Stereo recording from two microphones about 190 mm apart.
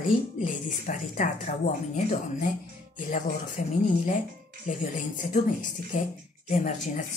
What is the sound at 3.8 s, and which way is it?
A woman's voice, 40° left (ahead or behind).